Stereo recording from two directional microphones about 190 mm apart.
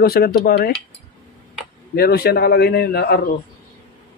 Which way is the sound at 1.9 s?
55° left (ahead or behind).